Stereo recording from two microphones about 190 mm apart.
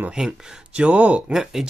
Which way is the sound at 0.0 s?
5° right (ahead or behind).